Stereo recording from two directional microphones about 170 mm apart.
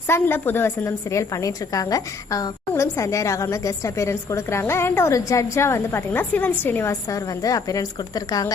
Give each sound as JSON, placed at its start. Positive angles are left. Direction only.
{"t": 0.1, "sound": "a woman's voice", "side_deg": 10}